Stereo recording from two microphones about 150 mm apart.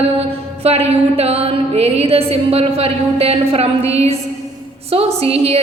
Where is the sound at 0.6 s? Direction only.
45° right (ahead or behind).